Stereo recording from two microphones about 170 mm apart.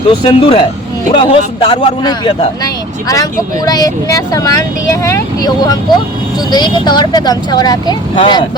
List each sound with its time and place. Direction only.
0.1 s a man's voice: 30° left (ahead or behind)
3.7 s speech: 20° left (ahead or behind)